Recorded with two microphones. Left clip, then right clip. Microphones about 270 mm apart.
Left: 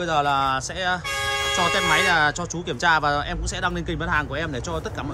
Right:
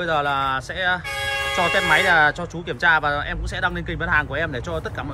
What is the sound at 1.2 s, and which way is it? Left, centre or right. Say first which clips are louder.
Toot: even; left.